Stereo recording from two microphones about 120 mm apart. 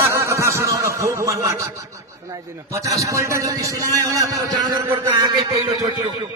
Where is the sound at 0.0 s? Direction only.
20° right (ahead or behind).